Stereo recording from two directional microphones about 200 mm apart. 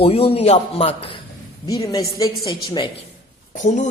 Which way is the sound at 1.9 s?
15° left (ahead or behind).